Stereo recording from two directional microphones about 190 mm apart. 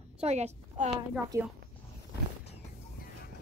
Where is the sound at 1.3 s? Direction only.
15° right (ahead or behind).